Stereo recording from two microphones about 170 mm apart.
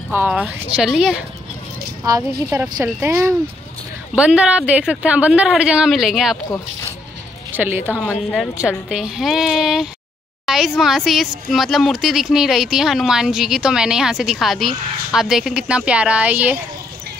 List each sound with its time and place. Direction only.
0.1 s speech: 10° right (ahead or behind)
2.0 s speech: 20° right (ahead or behind); by 6.3 s centre (ahead or behind)
7.5 s a woman's voice: 10° right (ahead or behind)
8.0 s speech: centre (ahead or behind)